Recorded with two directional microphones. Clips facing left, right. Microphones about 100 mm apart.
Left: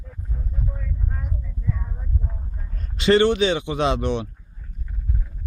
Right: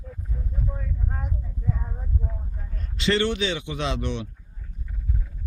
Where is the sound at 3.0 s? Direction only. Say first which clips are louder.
Left 7 dB; 50° left (ahead or behind).